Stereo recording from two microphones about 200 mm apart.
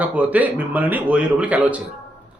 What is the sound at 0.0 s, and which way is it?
A man's voice, 5° right (ahead or behind).